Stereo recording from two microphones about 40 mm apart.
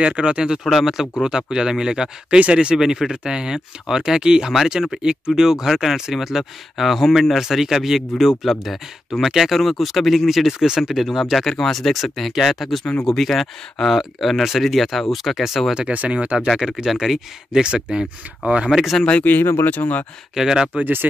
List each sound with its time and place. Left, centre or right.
0.0 s speech: right
0.7 s speech: centre
1.2 s speech: centre
15.9 s speech: right
16.5 s speech: centre
17.5 s speech: centre
18.7 s speech: centre
19.4 s speech: left
19.8 s speech: left
20.3 s speech: centre
20.8 s speech: right